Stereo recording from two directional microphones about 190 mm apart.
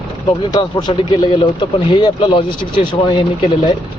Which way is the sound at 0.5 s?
20° left (ahead or behind).